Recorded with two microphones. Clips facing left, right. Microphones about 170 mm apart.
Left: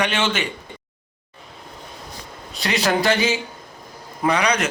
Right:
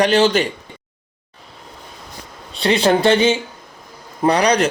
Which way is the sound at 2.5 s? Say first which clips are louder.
Right 6 dB; 30° right (ahead or behind).